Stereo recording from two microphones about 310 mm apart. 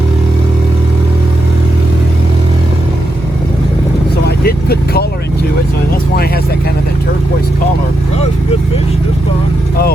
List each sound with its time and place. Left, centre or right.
4.3 s vehicle: left